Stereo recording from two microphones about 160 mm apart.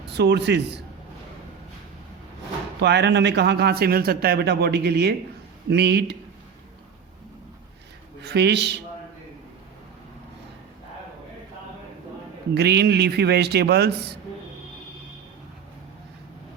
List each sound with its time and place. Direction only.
0.0 s a man's voice: 90° right
2.8 s a man's voice: 90° right
8.2 s a man's voice: 90° right
12.5 s a man's voice: 90° right